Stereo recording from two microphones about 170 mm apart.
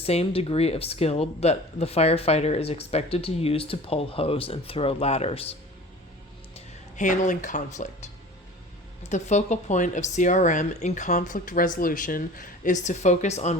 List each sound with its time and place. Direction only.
0.0 s speech: 35° left (ahead or behind)
6.9 s speech: 45° left (ahead or behind)